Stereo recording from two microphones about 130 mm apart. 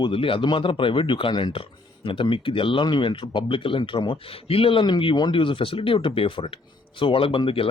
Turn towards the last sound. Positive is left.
turn(degrees=45)  # may be behind; listen again after turning